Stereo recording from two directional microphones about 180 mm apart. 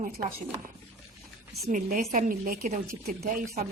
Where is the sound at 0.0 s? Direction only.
50° right (ahead or behind).